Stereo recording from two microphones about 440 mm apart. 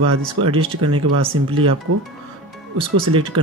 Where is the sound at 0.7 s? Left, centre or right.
Right.